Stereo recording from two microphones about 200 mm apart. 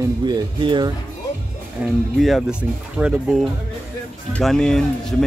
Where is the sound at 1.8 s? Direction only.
Centre (ahead or behind).